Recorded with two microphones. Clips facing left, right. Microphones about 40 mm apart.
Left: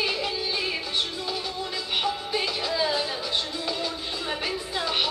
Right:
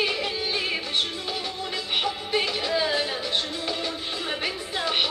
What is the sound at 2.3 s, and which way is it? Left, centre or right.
Music, right.